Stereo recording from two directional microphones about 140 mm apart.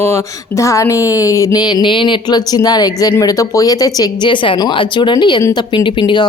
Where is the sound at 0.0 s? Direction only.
20° left (ahead or behind).